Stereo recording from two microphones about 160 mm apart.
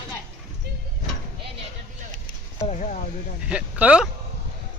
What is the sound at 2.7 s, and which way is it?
Speech, 50° left (ahead or behind).